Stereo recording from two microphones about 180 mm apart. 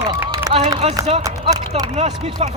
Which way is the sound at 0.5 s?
20° right (ahead or behind).